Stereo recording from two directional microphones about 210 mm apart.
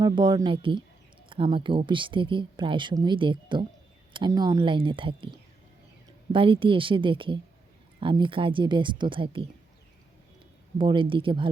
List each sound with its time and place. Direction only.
0.0 s speech: 20° right (ahead or behind)
6.3 s speech: 25° right (ahead or behind)
10.8 s speech: 25° right (ahead or behind)